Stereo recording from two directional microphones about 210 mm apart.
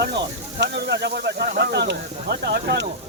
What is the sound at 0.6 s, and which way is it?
Speech, 55° right (ahead or behind).